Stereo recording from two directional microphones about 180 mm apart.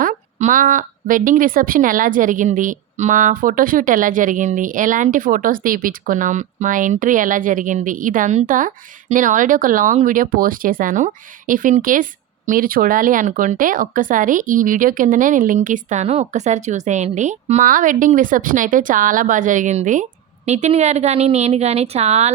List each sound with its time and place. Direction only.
0.0 s speech: 45° right (ahead or behind)